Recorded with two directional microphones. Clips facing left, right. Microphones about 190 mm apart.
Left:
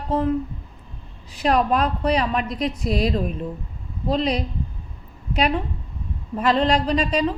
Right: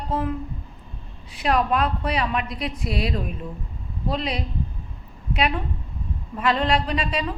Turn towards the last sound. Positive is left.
turn(degrees=40)  # may be behind; listen again after turning